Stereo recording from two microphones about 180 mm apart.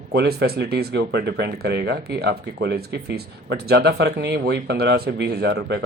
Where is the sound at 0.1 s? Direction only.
65° right (ahead or behind).